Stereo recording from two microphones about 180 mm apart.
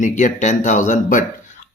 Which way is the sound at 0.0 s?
45° left (ahead or behind).